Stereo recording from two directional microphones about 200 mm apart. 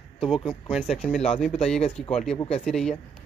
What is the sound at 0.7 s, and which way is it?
Speech, centre (ahead or behind).